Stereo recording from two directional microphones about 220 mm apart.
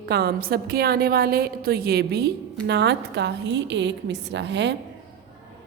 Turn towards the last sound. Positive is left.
turn(degrees=-55)  # may be behind; listen again after turning